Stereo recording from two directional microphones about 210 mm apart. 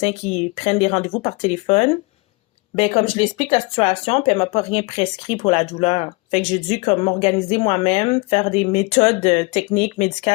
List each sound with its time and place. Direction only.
0.0 s speech: 30° left (ahead or behind)